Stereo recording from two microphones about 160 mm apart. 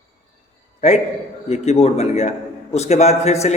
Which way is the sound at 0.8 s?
45° left (ahead or behind).